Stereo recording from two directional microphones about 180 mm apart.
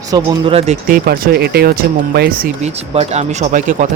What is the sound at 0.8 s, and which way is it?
Speech, 50° right (ahead or behind).